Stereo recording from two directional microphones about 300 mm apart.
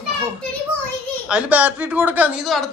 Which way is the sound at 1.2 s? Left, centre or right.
Centre.